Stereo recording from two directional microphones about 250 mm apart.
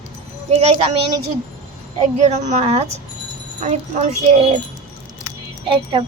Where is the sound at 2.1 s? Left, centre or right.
Right.